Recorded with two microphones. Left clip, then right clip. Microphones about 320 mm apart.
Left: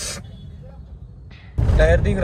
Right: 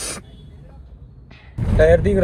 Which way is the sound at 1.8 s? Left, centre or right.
Centre.